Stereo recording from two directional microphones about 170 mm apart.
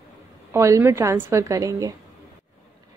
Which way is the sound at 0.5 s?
15° right (ahead or behind).